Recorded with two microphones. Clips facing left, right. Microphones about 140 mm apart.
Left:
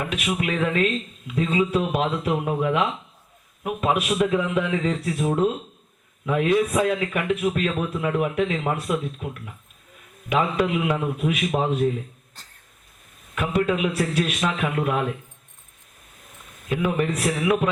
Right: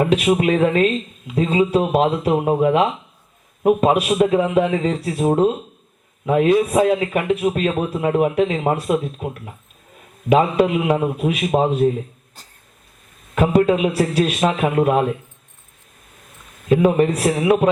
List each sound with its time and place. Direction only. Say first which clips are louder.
0.0 s speech: right 10 dB; 30° right (ahead or behind)
12.4 s vehicle: right 3 dB; 10° right (ahead or behind)
13.3 s speech: right 7 dB; 30° right (ahead or behind)
16.6 s speech: right 8 dB; 35° right (ahead or behind)